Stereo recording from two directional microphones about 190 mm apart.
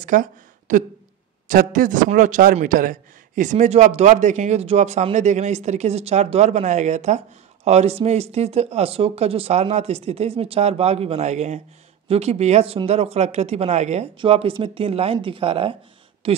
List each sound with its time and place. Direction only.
0.0 s a woman's voice: 45° right (ahead or behind); by 16.4 s 30° right (ahead or behind)